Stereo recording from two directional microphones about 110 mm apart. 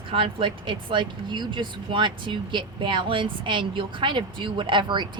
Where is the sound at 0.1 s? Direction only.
55° right (ahead or behind).